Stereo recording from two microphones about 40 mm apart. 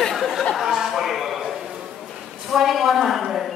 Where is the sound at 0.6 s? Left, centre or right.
Centre.